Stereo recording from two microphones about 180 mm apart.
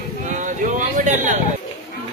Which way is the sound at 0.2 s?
45° right (ahead or behind).